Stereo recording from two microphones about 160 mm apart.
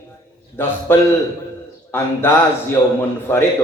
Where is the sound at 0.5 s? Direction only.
15° left (ahead or behind).